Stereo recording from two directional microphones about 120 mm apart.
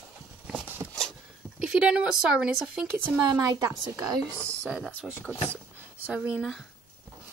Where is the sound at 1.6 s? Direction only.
5° right (ahead or behind).